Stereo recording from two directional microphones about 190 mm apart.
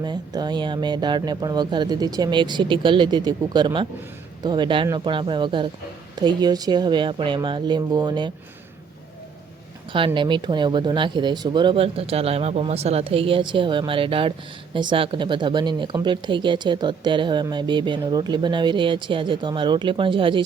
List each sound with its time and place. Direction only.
0.0 s speech: 20° right (ahead or behind)
10.2 s speech: 25° right (ahead or behind)